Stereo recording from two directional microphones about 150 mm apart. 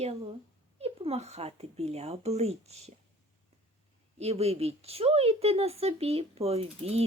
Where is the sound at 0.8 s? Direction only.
40° right (ahead or behind).